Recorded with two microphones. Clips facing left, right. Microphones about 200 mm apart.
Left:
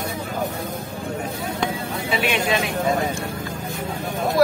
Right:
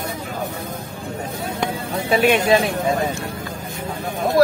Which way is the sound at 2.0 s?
45° right (ahead or behind).